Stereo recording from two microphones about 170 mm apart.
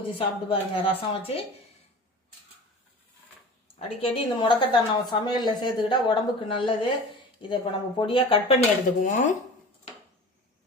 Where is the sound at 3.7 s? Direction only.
35° left (ahead or behind).